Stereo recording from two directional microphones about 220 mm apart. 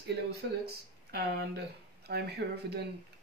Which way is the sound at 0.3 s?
45° right (ahead or behind).